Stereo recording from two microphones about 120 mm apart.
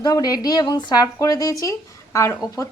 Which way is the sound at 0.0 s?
30° left (ahead or behind).